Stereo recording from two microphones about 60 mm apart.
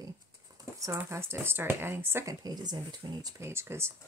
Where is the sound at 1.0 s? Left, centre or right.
Right.